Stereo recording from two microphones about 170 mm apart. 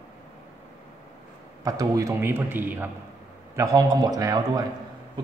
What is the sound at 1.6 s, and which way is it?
A man's voice, 20° right (ahead or behind).